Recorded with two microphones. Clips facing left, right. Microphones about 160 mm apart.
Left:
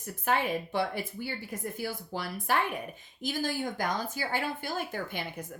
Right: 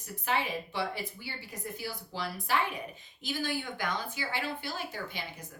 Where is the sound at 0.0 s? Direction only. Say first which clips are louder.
Left 3 dB; 50° left (ahead or behind).